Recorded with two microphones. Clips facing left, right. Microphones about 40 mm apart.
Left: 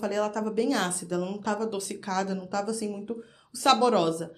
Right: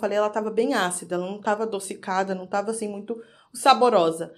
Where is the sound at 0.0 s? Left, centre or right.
Right.